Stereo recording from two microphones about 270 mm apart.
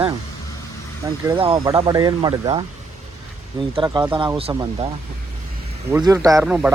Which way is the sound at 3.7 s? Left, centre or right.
Centre.